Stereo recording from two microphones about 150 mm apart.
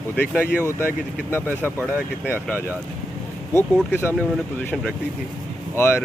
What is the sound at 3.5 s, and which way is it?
Speech, 15° left (ahead or behind).